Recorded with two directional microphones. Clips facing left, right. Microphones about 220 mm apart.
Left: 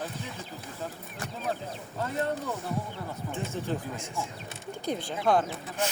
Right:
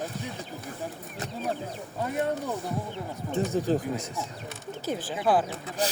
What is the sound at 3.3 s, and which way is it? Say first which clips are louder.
Speech: right 8 dB; 40° right (ahead or behind).